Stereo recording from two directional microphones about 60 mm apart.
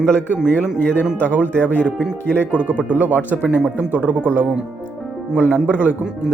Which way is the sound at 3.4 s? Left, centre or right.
Centre.